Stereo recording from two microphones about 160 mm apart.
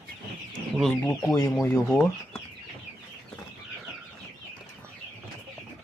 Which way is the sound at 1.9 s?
15° left (ahead or behind).